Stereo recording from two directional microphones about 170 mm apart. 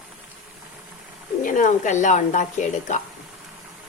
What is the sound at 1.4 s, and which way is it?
Speech, 50° left (ahead or behind).